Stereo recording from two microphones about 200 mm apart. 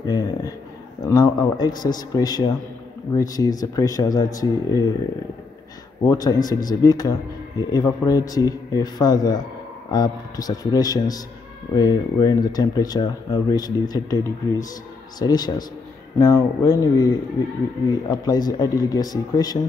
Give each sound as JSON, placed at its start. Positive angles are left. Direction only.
{"t": 0.0, "sound": "speech", "side_deg": 20}
{"t": 6.0, "sound": "speech", "side_deg": 20}